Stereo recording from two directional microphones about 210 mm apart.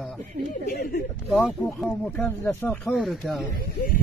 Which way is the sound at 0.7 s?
45° left (ahead or behind).